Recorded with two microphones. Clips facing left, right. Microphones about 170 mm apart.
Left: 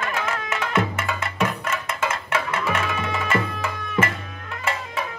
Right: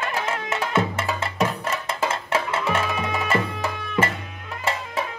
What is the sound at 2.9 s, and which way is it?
Music, 10° right (ahead or behind).